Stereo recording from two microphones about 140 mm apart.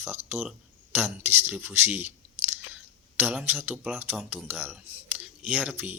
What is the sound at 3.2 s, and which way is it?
Speech, 15° right (ahead or behind).